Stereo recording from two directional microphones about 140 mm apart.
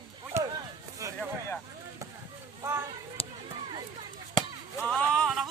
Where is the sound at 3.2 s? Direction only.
40° left (ahead or behind).